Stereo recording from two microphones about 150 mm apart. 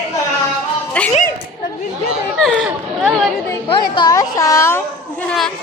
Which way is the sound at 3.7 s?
30° left (ahead or behind).